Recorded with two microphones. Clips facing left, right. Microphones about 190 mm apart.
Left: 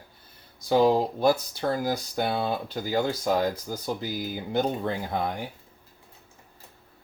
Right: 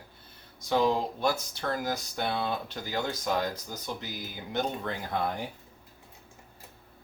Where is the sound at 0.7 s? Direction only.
35° left (ahead or behind).